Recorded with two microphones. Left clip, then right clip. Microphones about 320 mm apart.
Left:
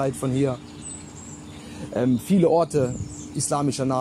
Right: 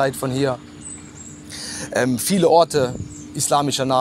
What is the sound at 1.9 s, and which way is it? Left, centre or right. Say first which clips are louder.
Speech: right 3 dB; right.